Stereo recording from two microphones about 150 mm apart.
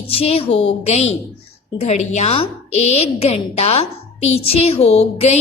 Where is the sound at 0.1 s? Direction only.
40° left (ahead or behind).